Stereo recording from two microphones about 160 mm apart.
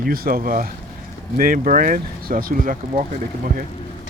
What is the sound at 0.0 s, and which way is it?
Speech, 65° right (ahead or behind).